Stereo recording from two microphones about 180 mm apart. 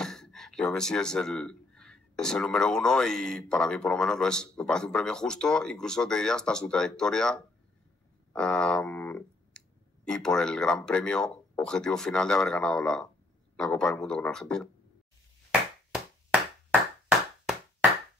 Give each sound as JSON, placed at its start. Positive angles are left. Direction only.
{"t": 0.0, "sound": "speech", "side_deg": 5}
{"t": 8.3, "sound": "clicking", "side_deg": 5}
{"t": 10.0, "sound": "speech", "side_deg": 5}